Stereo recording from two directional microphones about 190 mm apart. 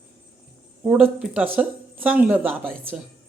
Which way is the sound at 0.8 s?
5° right (ahead or behind).